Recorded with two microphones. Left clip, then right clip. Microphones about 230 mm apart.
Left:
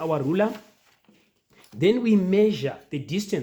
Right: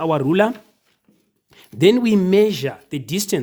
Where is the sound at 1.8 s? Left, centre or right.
Right.